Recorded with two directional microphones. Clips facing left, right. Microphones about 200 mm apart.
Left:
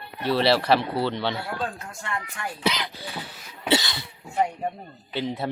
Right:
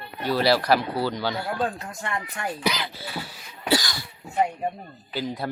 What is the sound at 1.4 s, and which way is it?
Speech, 20° right (ahead or behind).